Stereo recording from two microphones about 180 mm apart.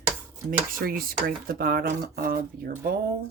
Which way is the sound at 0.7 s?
55° right (ahead or behind).